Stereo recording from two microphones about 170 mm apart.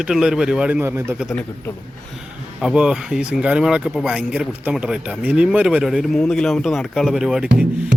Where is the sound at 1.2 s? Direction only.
Centre (ahead or behind).